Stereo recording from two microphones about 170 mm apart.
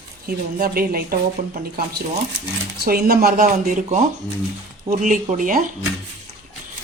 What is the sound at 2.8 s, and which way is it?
Speech, 65° right (ahead or behind).